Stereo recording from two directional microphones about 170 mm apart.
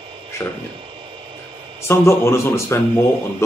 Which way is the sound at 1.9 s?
15° left (ahead or behind).